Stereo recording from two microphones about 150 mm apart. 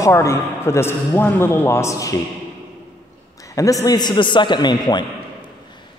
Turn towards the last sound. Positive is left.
turn(degrees=30)  # may be behind; listen again after turning